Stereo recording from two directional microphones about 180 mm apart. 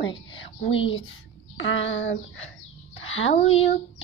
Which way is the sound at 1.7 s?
90° left.